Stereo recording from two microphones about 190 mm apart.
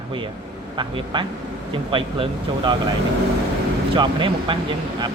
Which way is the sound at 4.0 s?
25° right (ahead or behind).